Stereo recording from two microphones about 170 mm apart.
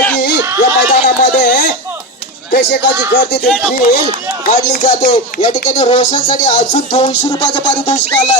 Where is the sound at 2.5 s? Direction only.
85° left.